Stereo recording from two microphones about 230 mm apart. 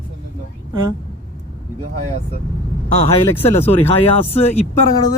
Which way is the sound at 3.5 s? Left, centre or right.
Left.